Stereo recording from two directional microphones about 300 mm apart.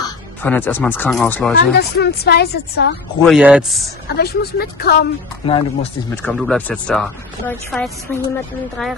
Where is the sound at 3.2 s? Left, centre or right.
Centre.